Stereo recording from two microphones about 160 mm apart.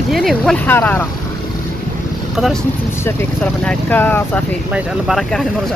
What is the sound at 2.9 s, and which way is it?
Speech, 15° left (ahead or behind).